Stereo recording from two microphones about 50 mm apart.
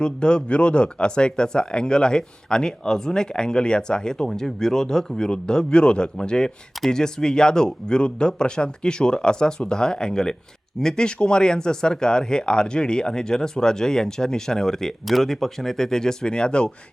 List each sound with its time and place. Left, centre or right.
0.0 s speech: centre